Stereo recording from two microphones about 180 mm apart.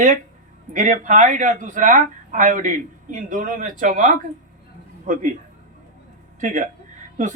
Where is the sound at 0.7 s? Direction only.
45° right (ahead or behind).